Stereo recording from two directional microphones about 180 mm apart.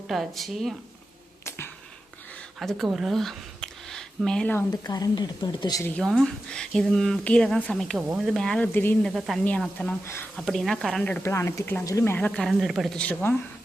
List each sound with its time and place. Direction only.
0.1 s speech: centre (ahead or behind)
1.5 s a sound: 10° left (ahead or behind)
2.6 s speech: centre (ahead or behind)
4.7 s a woman's voice: 20° left (ahead or behind)
6.0 s speech: centre (ahead or behind)
9.1 s speech: centre (ahead or behind)